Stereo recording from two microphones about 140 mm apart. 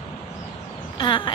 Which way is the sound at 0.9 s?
35° left (ahead or behind).